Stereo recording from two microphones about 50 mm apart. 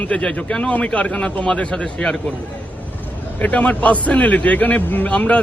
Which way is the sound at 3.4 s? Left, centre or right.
Left.